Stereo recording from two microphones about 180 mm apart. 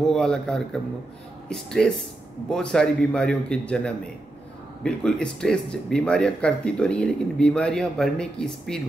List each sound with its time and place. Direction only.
0.0 s speech: 5° left (ahead or behind)